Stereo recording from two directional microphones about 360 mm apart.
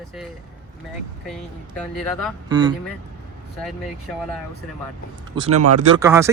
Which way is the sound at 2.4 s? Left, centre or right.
Centre.